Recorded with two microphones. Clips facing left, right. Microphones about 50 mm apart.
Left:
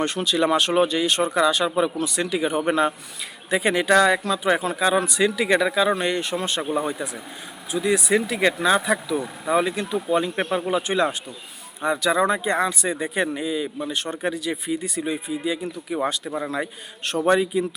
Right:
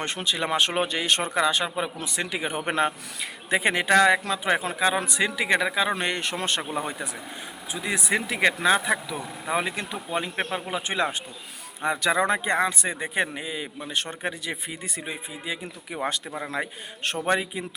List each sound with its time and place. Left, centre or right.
0.0 s speech: right
6.0 s speech: right
7.0 s speech: right
10.5 s speech: centre
10.8 s speech: right
11.8 s speech: right
16.0 s speech: right